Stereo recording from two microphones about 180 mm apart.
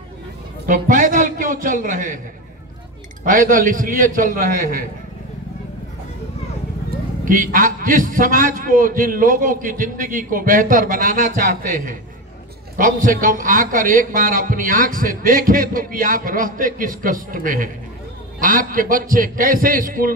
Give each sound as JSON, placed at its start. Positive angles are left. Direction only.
{"t": 0.7, "sound": "a man's voice", "side_deg": -50}
{"t": 3.3, "sound": "a man's voice", "side_deg": -50}
{"t": 7.2, "sound": "a man's voice", "side_deg": -50}